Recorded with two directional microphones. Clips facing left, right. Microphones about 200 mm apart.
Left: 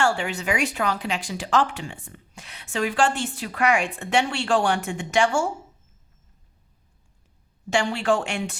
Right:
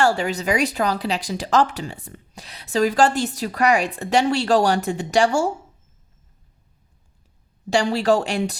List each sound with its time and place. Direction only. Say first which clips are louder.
0.0 s speech: right 4 dB; 40° right (ahead or behind)
7.7 s speech: right 4 dB; 35° right (ahead or behind)